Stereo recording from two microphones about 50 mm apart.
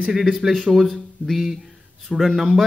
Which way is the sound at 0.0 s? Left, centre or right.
Centre.